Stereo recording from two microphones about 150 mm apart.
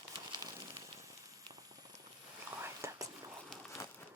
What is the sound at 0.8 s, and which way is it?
Hiss, 20° right (ahead or behind).